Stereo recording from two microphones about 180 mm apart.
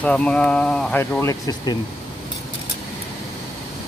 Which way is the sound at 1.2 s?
20° left (ahead or behind).